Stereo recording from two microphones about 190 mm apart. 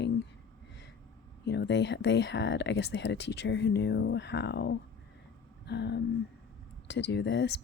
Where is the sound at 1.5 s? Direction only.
60° left (ahead or behind).